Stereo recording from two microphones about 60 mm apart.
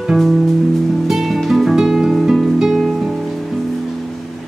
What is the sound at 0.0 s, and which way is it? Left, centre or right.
Music, centre.